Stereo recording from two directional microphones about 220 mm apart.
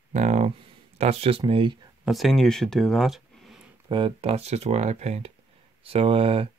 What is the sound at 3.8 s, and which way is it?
Speech, 20° right (ahead or behind).